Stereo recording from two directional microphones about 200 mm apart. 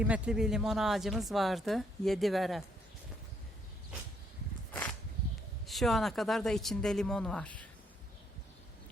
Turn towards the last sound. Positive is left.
turn(degrees=5)  # may be behind; listen again after turning